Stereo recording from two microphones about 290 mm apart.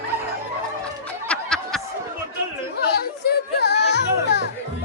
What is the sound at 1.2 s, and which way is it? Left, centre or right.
Snicker, centre.